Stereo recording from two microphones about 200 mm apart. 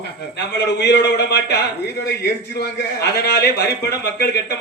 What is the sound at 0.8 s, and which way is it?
Speech, 55° left (ahead or behind).